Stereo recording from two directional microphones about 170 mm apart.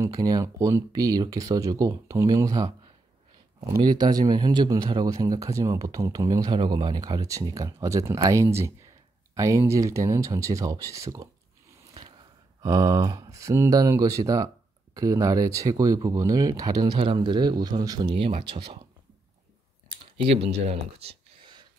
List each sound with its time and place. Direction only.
0.0 s speech: 20° right (ahead or behind)
3.8 s speech: 25° right (ahead or behind)
12.6 s speech: 20° right (ahead or behind)
20.2 s speech: 35° right (ahead or behind)